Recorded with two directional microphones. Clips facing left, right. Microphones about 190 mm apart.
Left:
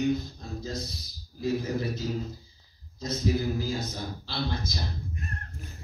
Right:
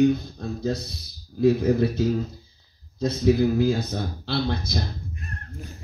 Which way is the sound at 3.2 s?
55° right (ahead or behind).